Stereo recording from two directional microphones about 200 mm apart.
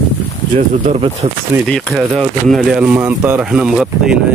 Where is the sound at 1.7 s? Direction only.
5° left (ahead or behind).